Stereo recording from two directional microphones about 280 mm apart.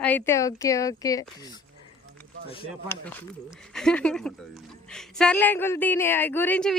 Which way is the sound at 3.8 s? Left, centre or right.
Centre.